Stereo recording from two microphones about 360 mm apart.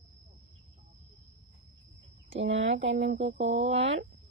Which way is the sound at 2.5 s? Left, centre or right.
Centre.